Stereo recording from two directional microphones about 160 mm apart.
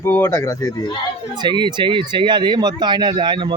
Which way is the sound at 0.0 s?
15° left (ahead or behind).